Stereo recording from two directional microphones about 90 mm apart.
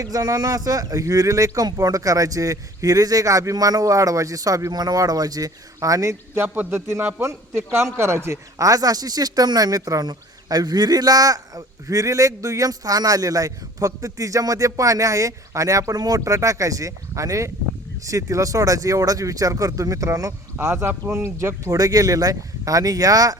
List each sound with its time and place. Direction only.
0.0 s speech: 40° right (ahead or behind)
6.4 s a man's voice: 20° right (ahead or behind); by 23.4 s 40° right (ahead or behind)